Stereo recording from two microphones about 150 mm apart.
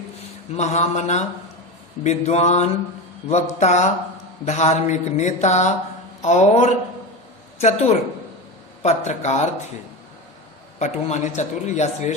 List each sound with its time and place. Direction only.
0.5 s speech: 50° left (ahead or behind)
10.8 s speech: 50° left (ahead or behind)